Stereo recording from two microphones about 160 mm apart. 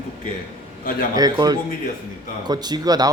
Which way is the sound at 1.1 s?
25° right (ahead or behind).